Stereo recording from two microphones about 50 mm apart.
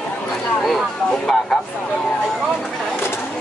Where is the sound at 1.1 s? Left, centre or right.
Centre.